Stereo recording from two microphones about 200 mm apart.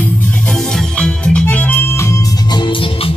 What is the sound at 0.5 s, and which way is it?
Music, 5° left (ahead or behind).